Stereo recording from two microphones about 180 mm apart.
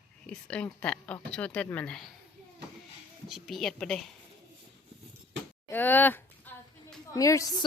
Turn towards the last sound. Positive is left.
turn(degrees=20)  # may be behind; listen again after turning